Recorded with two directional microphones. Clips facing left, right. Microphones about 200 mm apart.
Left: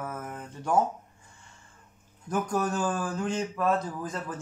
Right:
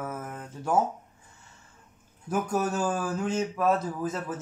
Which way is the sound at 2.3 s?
5° right (ahead or behind).